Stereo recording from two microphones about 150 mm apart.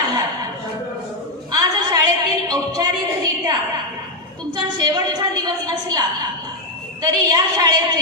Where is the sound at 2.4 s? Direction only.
25° right (ahead or behind).